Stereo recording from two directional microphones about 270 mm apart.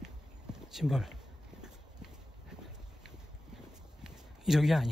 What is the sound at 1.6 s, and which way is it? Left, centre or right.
Horse, centre.